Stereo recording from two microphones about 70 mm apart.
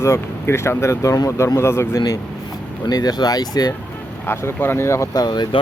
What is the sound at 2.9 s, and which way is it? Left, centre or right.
Speech, left.